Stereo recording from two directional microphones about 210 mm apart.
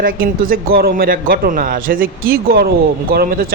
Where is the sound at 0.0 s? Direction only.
45° right (ahead or behind).